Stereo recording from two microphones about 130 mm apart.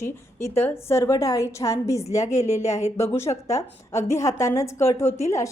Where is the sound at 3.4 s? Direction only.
25° left (ahead or behind).